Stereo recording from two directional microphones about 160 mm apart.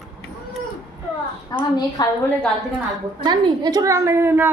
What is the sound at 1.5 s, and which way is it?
Speech, 25° left (ahead or behind).